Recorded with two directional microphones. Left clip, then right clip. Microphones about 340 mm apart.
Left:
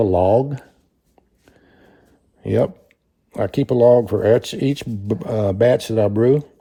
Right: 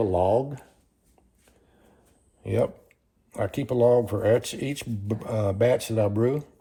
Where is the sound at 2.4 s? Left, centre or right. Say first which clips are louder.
Left 7 dB; left.